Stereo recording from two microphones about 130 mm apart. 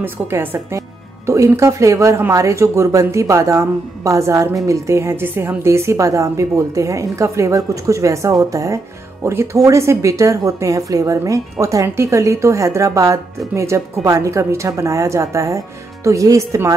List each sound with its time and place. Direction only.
0.0 s speech: 15° right (ahead or behind)